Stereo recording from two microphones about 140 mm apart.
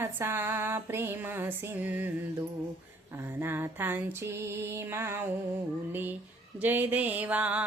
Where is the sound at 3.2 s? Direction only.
15° right (ahead or behind).